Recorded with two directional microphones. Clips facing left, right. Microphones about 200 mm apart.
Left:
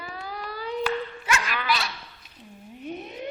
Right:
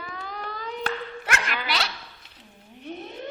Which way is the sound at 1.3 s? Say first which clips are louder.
Left 2 dB; 60° right (ahead or behind).